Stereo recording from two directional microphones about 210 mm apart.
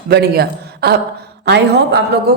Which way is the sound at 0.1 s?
50° right (ahead or behind).